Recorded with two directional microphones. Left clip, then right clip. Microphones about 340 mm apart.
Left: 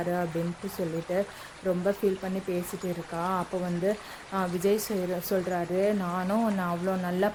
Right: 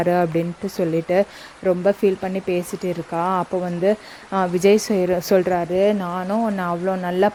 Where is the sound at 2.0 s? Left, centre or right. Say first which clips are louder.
Right 8 dB; right.